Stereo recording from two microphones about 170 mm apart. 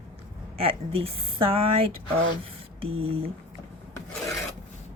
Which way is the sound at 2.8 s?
35° right (ahead or behind).